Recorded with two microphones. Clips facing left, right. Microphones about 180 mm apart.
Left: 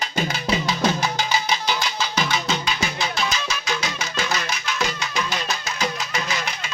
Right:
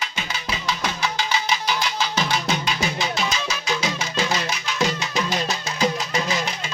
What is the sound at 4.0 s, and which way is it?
Music, 30° right (ahead or behind).